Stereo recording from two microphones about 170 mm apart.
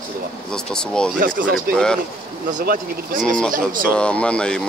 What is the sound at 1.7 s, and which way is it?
Speech, 5° left (ahead or behind).